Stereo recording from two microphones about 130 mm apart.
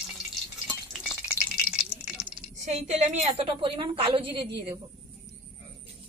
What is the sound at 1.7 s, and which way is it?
Rattle, centre (ahead or behind).